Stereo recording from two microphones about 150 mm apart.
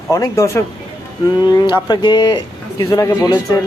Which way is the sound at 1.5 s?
30° left (ahead or behind).